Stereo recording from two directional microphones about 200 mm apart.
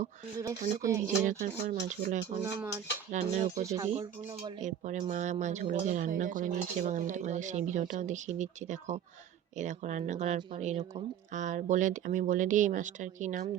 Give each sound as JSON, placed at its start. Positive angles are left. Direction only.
{"t": 0.4, "sound": "speech", "side_deg": -15}
{"t": 1.2, "sound": "speech", "side_deg": -40}
{"t": 2.4, "sound": "speech", "side_deg": -10}
{"t": 3.1, "sound": "speech", "side_deg": -35}
{"t": 3.6, "sound": "speech", "side_deg": -15}
{"t": 4.6, "sound": "speech", "side_deg": -35}